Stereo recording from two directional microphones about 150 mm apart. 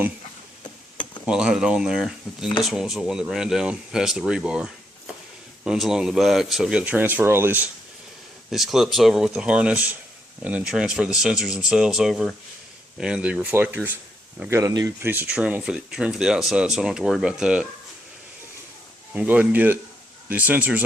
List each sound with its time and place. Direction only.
1.3 s speech: 5° right (ahead or behind)
8.4 s speech: centre (ahead or behind)
14.5 s speech: 25° right (ahead or behind)
15.0 s speech: 15° right (ahead or behind)
19.1 s speech: 10° right (ahead or behind)